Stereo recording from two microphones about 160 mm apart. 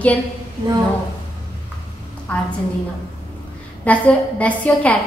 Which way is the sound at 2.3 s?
10° left (ahead or behind).